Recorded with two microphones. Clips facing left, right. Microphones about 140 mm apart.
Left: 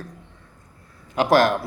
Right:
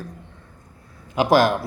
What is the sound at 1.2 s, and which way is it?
Speech, 5° right (ahead or behind).